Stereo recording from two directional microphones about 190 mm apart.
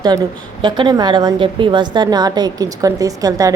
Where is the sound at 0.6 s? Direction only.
25° right (ahead or behind).